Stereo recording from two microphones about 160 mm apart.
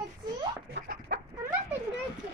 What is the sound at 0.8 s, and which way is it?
Chicken, 60° right (ahead or behind).